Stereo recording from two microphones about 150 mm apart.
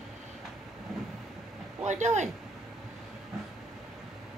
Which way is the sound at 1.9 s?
50° right (ahead or behind).